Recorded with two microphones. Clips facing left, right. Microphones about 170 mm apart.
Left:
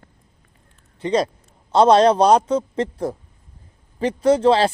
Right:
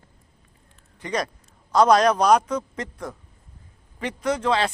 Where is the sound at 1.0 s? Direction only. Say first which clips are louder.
Left 7 dB; 25° left (ahead or behind).